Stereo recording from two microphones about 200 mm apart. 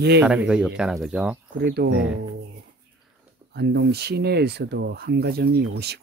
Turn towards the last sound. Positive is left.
turn(degrees=-55)  # may be behind; listen again after turning